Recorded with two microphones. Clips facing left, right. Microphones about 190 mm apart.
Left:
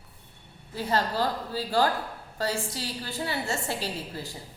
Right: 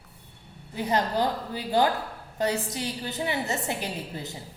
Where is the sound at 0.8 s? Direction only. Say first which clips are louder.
Right 2 dB; 20° right (ahead or behind).